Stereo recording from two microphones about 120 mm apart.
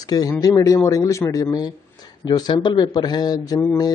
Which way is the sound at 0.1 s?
30° left (ahead or behind).